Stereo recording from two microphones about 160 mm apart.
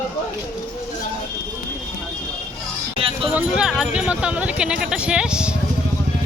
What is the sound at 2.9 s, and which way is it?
Music, 35° right (ahead or behind).